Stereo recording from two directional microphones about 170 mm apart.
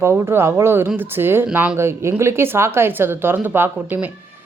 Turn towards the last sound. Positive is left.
turn(degrees=-10)  # may be behind; listen again after turning